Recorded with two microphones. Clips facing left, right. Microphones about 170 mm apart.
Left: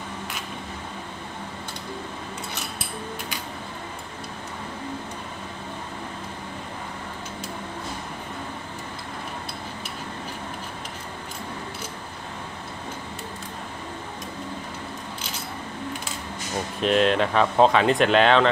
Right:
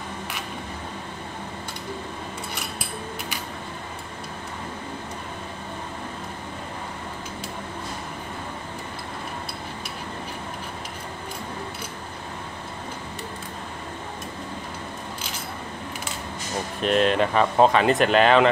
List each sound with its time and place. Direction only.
16.8 s speech: centre (ahead or behind)